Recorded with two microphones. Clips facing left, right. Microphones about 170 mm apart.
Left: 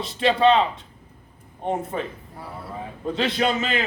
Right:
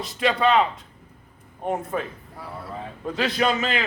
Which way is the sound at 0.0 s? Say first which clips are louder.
Left 3 dB; 30° left (ahead or behind).